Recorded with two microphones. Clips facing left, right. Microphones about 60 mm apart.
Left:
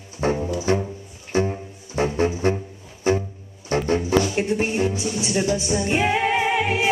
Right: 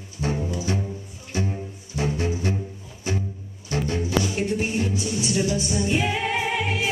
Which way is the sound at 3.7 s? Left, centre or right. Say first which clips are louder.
Left 5 dB; left.